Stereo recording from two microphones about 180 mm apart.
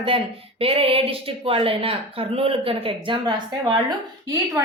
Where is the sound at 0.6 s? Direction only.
30° right (ahead or behind).